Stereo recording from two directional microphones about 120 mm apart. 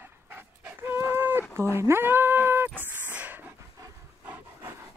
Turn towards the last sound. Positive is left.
turn(degrees=-15)  # may be behind; listen again after turning